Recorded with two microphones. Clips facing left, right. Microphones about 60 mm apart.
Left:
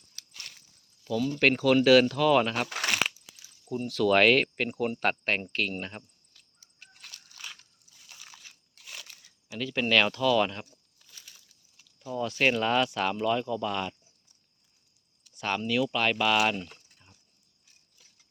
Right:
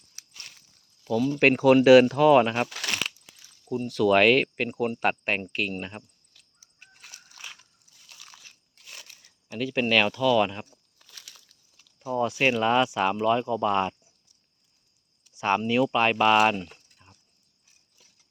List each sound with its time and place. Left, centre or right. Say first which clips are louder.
0.2 s a sound: left 1 dB; right
1.0 s speech: right 4 dB; centre
2.6 s speech: left 3 dB; left
3.7 s speech: right 3 dB; centre
6.7 s a sound: even; centre
7.4 s biting: right 1 dB; right
8.0 s biting: even; centre
9.6 s speech: right 2 dB; centre
11.0 s a sound: right 4 dB; right
11.9 s speech: right 6 dB; right
12.3 s speech: right 1 dB; centre; by 14.1 s right
15.4 s speech: right 5 dB; right
16.6 s speech: right 2 dB; centre